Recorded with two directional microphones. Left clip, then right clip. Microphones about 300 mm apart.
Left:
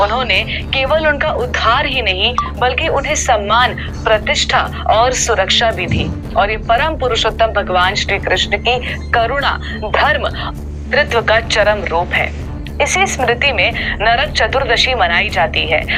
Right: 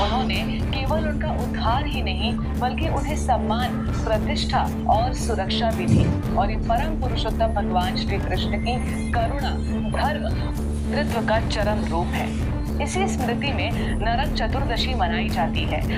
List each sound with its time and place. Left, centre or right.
0.3 s speech: left